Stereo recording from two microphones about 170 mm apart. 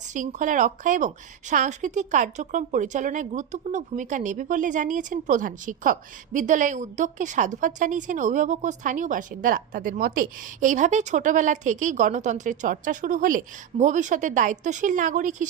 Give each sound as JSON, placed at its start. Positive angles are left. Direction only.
{"t": 0.1, "sound": "a woman's voice", "side_deg": -50}